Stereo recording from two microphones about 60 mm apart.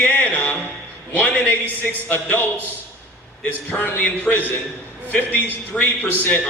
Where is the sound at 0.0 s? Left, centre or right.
Left.